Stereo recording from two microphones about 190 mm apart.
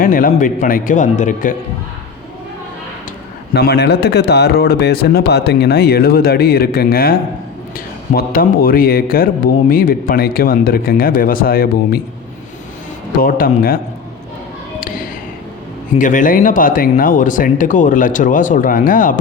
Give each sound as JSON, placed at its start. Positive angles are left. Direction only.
{"t": 0.0, "sound": "speech", "side_deg": 45}
{"t": 3.5, "sound": "speech", "side_deg": 60}
{"t": 13.1, "sound": "speech", "side_deg": 50}
{"t": 14.8, "sound": "a sound", "side_deg": 45}
{"t": 16.0, "sound": "speech", "side_deg": 45}